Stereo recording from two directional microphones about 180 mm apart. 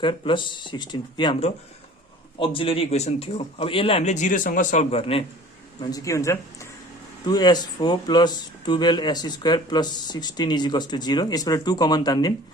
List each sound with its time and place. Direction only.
0.0 s a man's voice: 25° left (ahead or behind)
5.9 s speech: 15° left (ahead or behind)